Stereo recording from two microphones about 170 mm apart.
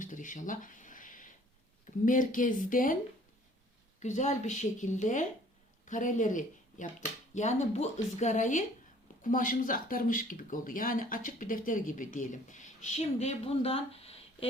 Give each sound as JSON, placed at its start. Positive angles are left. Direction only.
{"t": 0.0, "sound": "a sound", "side_deg": 50}
{"t": 2.0, "sound": "speech", "side_deg": 50}
{"t": 4.0, "sound": "a woman's voice", "side_deg": 45}